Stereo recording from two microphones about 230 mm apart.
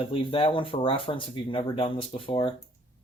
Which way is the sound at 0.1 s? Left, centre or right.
Left.